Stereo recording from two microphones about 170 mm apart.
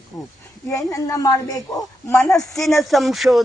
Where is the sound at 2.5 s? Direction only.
Centre (ahead or behind).